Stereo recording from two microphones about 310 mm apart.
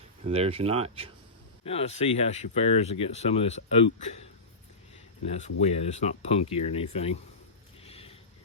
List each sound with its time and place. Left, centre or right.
0.3 s speech: centre
1.6 s speech: centre
7.9 s a sound: centre